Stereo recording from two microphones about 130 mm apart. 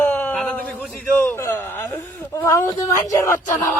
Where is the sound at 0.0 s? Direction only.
15° left (ahead or behind).